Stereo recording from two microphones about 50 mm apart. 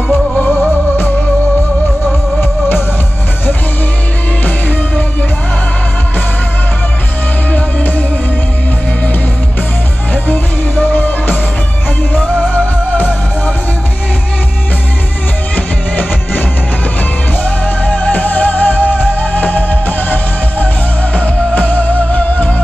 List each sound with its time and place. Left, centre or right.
0.1 s music: left
4.5 s music: left
10.1 s music: left
12.2 s music: centre
15.5 s music: left
21.1 s music: left